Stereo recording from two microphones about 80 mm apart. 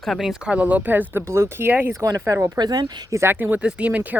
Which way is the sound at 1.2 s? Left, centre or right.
Right.